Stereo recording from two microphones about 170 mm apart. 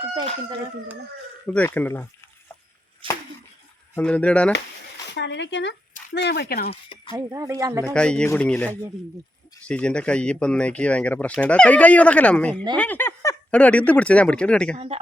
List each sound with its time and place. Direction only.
1.5 s speech: 10° left (ahead or behind)
3.0 s a sound: 30° right (ahead or behind)
3.9 s speech: 10° left (ahead or behind)
5.1 s speech: 90° left
6.1 s speech: 80° left
6.7 s a sound: 30° left (ahead or behind)
7.3 s speech: 20° right (ahead or behind)
7.9 s speech: 5° left (ahead or behind)